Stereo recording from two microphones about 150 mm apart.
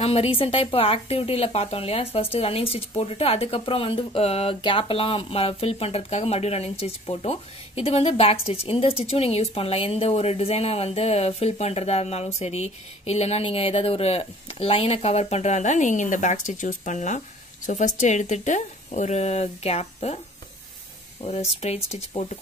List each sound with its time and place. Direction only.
0.0 s speech: 40° left (ahead or behind)
21.2 s speech: 40° left (ahead or behind)